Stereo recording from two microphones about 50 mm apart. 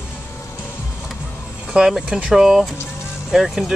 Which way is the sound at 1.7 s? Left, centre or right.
Centre.